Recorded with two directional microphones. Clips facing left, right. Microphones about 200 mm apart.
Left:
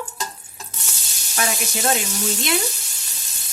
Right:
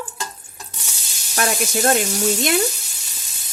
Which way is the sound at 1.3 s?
50° right (ahead or behind).